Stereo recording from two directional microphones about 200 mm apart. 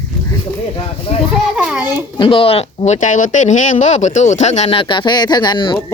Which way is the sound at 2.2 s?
25° left (ahead or behind).